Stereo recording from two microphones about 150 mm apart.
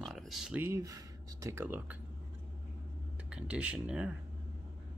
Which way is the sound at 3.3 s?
5° right (ahead or behind).